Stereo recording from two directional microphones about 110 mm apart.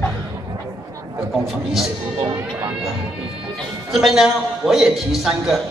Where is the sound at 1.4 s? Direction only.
Centre (ahead or behind).